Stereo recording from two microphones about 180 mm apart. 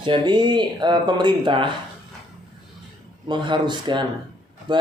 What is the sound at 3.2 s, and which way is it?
Speech, 25° right (ahead or behind).